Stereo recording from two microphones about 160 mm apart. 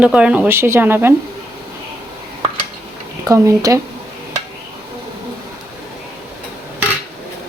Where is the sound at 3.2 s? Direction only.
20° right (ahead or behind).